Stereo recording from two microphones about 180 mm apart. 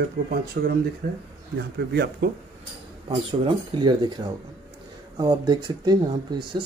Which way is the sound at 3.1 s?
25° right (ahead or behind).